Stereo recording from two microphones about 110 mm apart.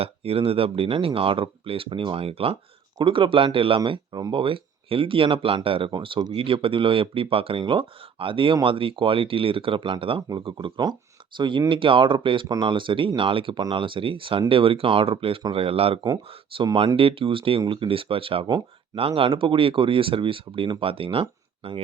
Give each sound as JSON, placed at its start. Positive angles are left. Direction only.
{"t": 0.0, "sound": "speech", "side_deg": -60}
{"t": 11.3, "sound": "speech", "side_deg": -45}